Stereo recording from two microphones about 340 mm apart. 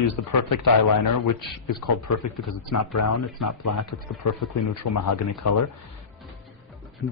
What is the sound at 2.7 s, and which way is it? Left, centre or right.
Speech, left.